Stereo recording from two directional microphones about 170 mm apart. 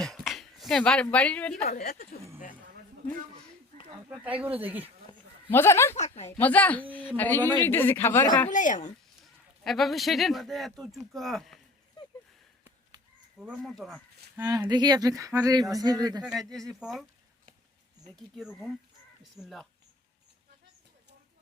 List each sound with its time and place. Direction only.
0.0 s a sound: centre (ahead or behind)
1.1 s speech: 10° left (ahead or behind)
1.8 s speech: 60° left (ahead or behind)
4.2 s speech: 10° right (ahead or behind)
5.5 s speech: 15° left (ahead or behind)
6.0 s a woman's voice: 40° left (ahead or behind)
6.3 s speech: 10° left (ahead or behind)
8.4 s speech: 45° left (ahead or behind)
9.2 s speech: centre (ahead or behind)
13.4 s speech: centre (ahead or behind)
14.3 s speech: 15° right (ahead or behind)
16.2 s speech: centre (ahead or behind)
18.3 s speech: centre (ahead or behind)